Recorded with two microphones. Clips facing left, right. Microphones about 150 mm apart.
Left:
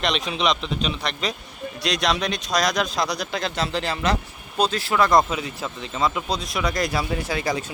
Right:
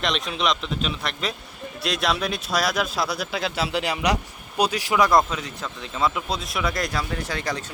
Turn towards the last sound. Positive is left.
turn(degrees=10)  # may be behind; listen again after turning